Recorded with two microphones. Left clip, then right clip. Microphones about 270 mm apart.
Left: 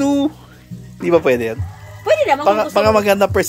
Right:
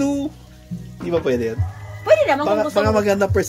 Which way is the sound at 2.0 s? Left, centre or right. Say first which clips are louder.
Left 1 dB; left.